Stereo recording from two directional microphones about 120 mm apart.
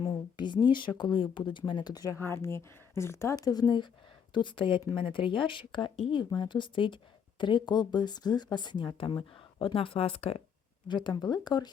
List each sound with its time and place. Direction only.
0.0 s speech: 45° left (ahead or behind)
2.1 s speech: 20° left (ahead or behind); by 10.4 s 55° left (ahead or behind)
10.8 s speech: 40° left (ahead or behind)